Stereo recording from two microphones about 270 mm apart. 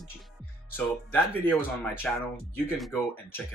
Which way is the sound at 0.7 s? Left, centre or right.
Centre.